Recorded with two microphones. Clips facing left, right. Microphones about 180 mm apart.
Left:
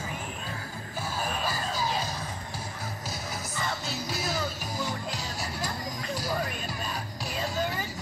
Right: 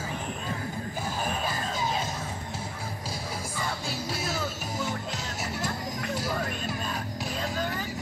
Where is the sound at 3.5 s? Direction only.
10° right (ahead or behind).